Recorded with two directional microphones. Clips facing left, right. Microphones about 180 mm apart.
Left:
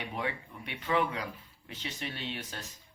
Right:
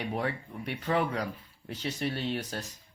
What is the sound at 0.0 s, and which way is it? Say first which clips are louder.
Speech: right 4 dB; 40° right (ahead or behind).